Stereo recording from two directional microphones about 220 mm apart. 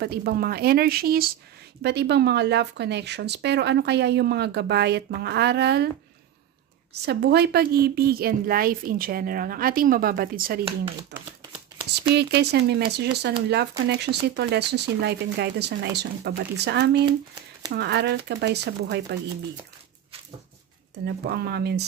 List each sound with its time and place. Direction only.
0.0 s speech: 45° right (ahead or behind)
6.9 s a woman's voice: 45° right (ahead or behind)
21.0 s speech: 45° right (ahead or behind)